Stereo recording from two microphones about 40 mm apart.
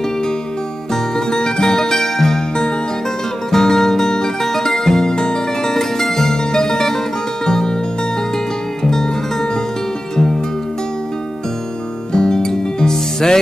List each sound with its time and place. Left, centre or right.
1.1 s music: centre
8.8 s music: centre
12.1 s music: centre